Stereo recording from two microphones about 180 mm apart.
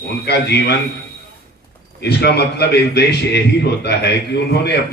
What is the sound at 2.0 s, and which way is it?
A man's voice, 65° left (ahead or behind).